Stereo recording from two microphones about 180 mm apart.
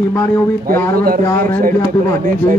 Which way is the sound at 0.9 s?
55° right (ahead or behind).